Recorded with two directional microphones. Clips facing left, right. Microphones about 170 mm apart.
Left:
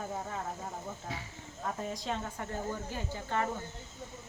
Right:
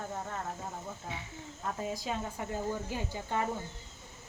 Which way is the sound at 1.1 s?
35° left (ahead or behind).